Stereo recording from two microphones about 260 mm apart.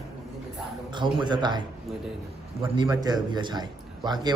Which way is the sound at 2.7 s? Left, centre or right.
Centre.